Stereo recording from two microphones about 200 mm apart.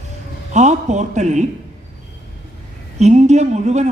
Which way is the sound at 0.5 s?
35° right (ahead or behind).